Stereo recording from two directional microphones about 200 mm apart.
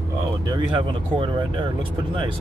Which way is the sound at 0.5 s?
25° right (ahead or behind).